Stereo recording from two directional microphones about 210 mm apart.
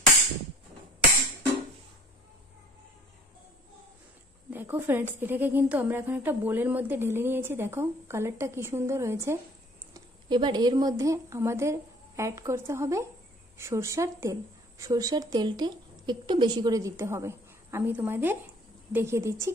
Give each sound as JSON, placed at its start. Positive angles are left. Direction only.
{"t": 4.5, "sound": "a woman's voice", "side_deg": -10}